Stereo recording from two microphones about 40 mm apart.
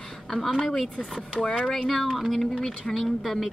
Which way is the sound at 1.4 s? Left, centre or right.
Centre.